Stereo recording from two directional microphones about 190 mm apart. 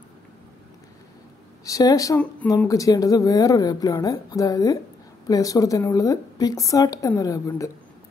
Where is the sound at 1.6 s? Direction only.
20° left (ahead or behind).